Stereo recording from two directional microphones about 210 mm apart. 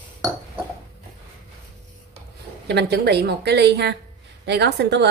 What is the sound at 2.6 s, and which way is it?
A woman's voice, 50° right (ahead or behind).